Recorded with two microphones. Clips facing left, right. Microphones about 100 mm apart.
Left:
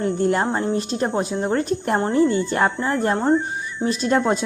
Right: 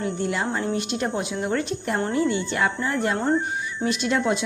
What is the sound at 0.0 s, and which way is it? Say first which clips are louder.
Speech: left 6 dB; 45° left (ahead or behind).